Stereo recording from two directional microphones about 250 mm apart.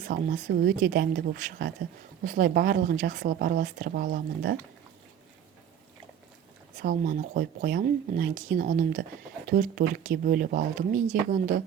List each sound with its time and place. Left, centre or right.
0.0 s speech: right
6.8 s speech: right